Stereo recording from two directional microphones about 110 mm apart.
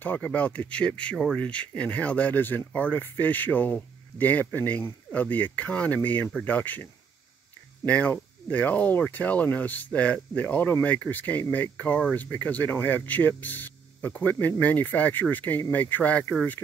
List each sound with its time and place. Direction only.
0.0 s speech: 15° left (ahead or behind)